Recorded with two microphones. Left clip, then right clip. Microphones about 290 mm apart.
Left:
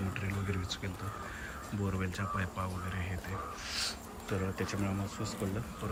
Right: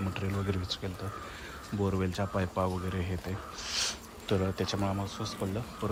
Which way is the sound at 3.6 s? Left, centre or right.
Right.